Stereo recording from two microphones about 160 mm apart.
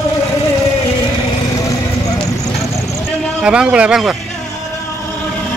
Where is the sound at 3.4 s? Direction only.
5° right (ahead or behind).